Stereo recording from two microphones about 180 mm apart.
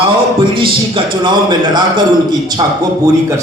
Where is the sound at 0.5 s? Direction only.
30° right (ahead or behind).